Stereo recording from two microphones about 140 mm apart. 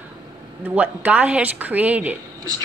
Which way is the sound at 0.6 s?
10° right (ahead or behind).